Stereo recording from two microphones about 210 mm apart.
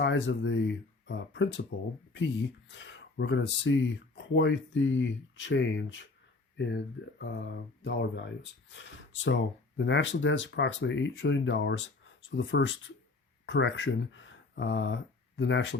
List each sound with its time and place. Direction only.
0.0 s speech: 60° left (ahead or behind)
7.2 s speech: 50° left (ahead or behind)